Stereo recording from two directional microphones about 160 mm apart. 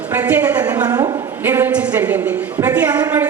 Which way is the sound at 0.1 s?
10° right (ahead or behind).